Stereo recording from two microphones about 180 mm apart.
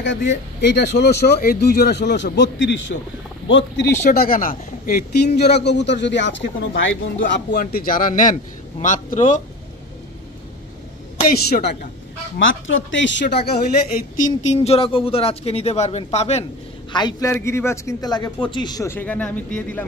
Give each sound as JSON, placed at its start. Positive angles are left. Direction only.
{"t": 0.0, "sound": "a man's voice", "side_deg": 85}
{"t": 4.0, "sound": "speech", "side_deg": 55}
{"t": 7.5, "sound": "a man's voice", "side_deg": 50}
{"t": 11.2, "sound": "a man's voice", "side_deg": 55}
{"t": 12.4, "sound": "speech", "side_deg": 90}
{"t": 13.9, "sound": "speech", "side_deg": 50}
{"t": 16.9, "sound": "a man's voice", "side_deg": 20}